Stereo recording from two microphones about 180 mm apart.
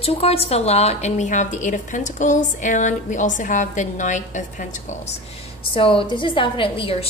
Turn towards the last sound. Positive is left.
turn(degrees=30)  # may be behind; listen again after turning